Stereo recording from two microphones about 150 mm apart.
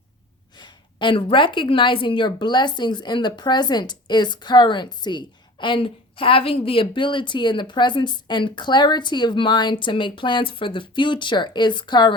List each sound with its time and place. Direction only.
0.5 s a woman's voice: 30° left (ahead or behind)